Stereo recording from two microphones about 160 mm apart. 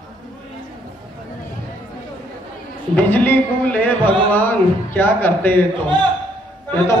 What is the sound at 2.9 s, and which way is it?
Speech, 10° left (ahead or behind).